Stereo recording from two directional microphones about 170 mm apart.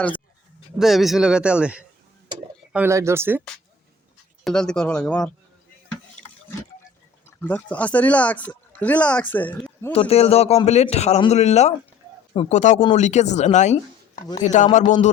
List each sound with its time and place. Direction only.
0.8 s a man's voice: centre (ahead or behind)
4.4 s a man's voice: 5° left (ahead or behind)
7.3 s speech: 10° left (ahead or behind)
9.9 s a man's voice: 35° left (ahead or behind)